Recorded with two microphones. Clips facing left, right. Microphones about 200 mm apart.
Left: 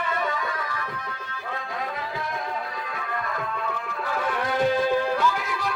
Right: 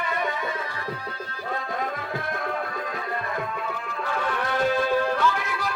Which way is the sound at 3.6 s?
5° left (ahead or behind).